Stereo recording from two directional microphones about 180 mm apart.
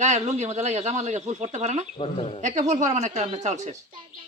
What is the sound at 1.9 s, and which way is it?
Speech, 35° left (ahead or behind).